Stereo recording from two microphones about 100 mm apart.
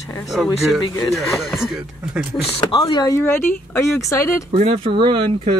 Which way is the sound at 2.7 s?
50° left (ahead or behind).